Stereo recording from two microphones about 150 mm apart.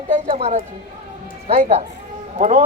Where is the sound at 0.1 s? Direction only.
40° right (ahead or behind).